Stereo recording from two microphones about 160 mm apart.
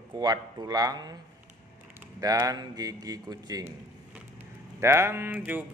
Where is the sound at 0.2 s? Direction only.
25° right (ahead or behind).